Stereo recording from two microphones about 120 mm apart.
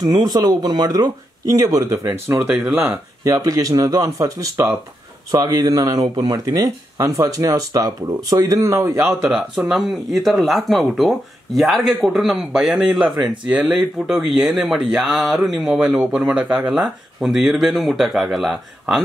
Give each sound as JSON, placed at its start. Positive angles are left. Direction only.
{"t": 0.0, "sound": "speech", "side_deg": -35}
{"t": 2.0, "sound": "speech", "side_deg": -15}
{"t": 2.9, "sound": "speech", "side_deg": -25}
{"t": 9.2, "sound": "speech", "side_deg": -5}